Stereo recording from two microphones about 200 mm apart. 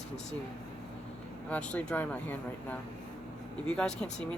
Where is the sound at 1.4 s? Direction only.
5° left (ahead or behind).